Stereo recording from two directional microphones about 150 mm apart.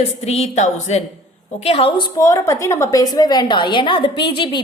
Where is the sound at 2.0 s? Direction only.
20° left (ahead or behind).